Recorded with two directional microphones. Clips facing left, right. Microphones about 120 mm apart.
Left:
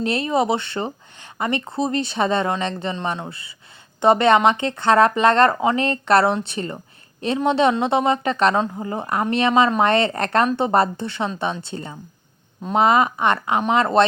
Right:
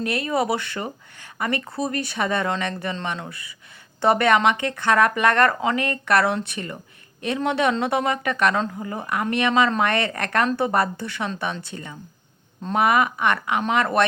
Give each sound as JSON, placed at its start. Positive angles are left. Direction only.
{"t": 0.0, "sound": "speech", "side_deg": 25}